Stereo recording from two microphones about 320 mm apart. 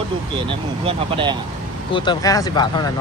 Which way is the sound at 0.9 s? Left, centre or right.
Centre.